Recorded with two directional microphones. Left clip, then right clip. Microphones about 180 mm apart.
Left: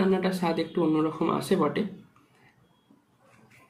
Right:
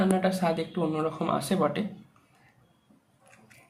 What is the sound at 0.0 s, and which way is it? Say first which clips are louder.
Speech: even; 60° right (ahead or behind).